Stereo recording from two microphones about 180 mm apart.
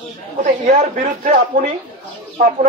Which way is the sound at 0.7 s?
50° right (ahead or behind).